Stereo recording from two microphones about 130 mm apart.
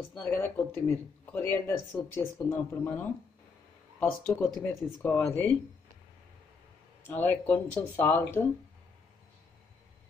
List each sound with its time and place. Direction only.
0.1 s speech: 15° left (ahead or behind)
7.1 s speech: 15° left (ahead or behind)